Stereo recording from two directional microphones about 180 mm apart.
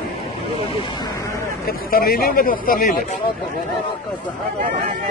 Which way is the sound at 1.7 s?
55° left (ahead or behind).